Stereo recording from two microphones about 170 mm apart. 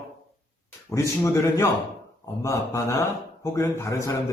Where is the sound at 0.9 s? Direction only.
15° left (ahead or behind).